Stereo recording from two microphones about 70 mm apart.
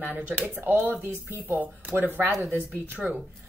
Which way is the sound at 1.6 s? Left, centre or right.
Right.